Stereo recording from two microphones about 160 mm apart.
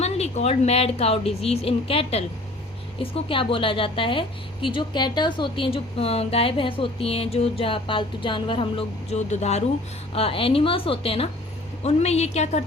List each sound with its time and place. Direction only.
0.0 s a woman's voice: 40° left (ahead or behind)